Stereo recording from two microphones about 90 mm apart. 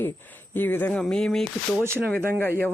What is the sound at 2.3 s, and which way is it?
Speech, 25° left (ahead or behind).